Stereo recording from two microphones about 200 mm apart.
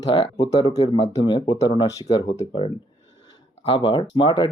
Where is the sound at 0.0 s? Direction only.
25° left (ahead or behind).